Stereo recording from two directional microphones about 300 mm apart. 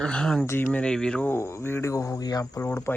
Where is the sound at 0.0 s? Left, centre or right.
Centre.